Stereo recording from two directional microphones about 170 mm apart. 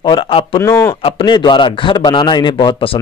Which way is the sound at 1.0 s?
30° left (ahead or behind).